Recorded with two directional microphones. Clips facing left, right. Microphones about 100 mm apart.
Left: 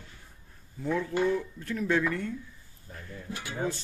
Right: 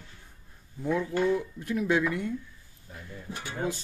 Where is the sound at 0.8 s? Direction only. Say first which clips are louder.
Right 1 dB; 15° right (ahead or behind).